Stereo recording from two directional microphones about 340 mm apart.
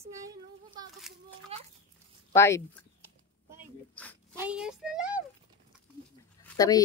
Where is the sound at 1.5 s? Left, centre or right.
Centre.